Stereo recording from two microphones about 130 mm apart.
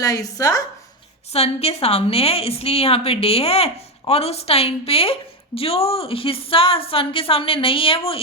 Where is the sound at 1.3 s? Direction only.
50° left (ahead or behind).